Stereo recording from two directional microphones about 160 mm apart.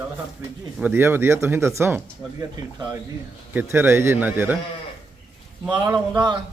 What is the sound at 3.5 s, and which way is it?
Speech, 15° right (ahead or behind).